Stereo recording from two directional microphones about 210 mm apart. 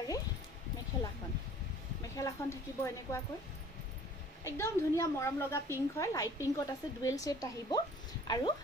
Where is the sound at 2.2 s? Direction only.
15° left (ahead or behind).